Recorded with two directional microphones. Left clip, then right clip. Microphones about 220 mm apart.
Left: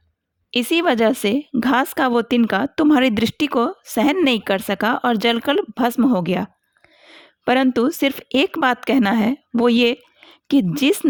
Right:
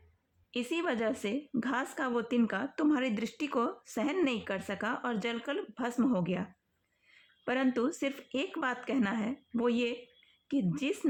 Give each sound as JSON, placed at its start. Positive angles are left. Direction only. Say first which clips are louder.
{"t": 0.5, "sound": "speech", "louder": "left 16 dB", "side_deg": 40}